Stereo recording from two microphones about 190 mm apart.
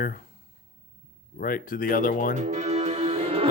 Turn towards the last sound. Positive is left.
turn(degrees=-30)  # may be behind; listen again after turning